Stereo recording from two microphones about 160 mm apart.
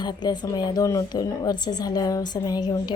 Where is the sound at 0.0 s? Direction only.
25° left (ahead or behind).